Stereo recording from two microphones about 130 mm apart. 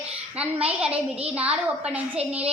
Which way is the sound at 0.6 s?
10° right (ahead or behind).